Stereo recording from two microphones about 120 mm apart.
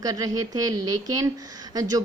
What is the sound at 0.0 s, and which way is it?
Speech, 30° right (ahead or behind).